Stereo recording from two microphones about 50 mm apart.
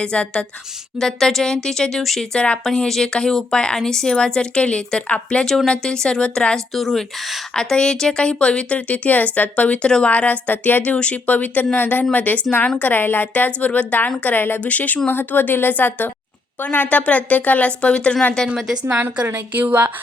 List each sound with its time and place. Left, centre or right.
0.0 s a woman's voice: left
0.9 s a woman's voice: centre
2.3 s a woman's voice: left
2.6 s a woman's voice: centre; by 5.5 s left
5.5 s a woman's voice: centre
6.7 s speech: centre
7.5 s a woman's voice: centre; by 14.0 s left
14.3 s a woman's voice: left
14.6 s a woman's voice: left
19.5 s a woman's voice: right